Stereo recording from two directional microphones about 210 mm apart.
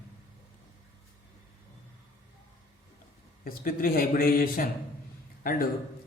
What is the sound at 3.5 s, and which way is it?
A man's voice, 45° left (ahead or behind).